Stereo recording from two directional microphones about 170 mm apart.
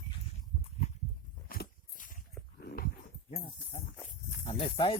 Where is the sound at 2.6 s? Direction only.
65° left (ahead or behind).